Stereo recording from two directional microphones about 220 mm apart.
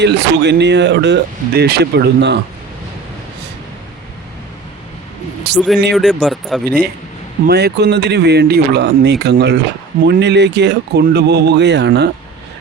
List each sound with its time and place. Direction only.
0.0 s speech: 50° right (ahead or behind)
5.5 s speech: 50° right (ahead or behind)
5.9 s speech: centre (ahead or behind)
7.4 s speech: 50° right (ahead or behind)